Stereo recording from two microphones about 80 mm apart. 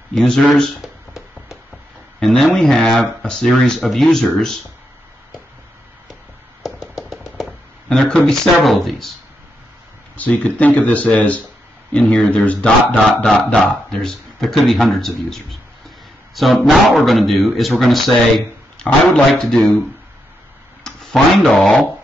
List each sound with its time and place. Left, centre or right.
0.1 s a sound: centre
2.1 s speech: centre
6.6 s a sound: centre
8.0 s speech: centre
10.1 s speech: centre
19.2 s speech: centre
20.8 s speech: centre